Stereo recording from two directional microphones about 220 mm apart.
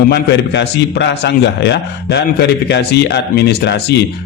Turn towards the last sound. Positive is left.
turn(degrees=50)  # may be behind; listen again after turning